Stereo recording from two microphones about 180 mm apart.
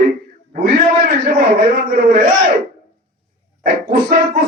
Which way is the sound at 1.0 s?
55° right (ahead or behind).